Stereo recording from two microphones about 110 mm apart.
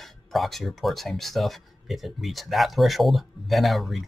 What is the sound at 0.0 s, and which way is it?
Speech, centre (ahead or behind).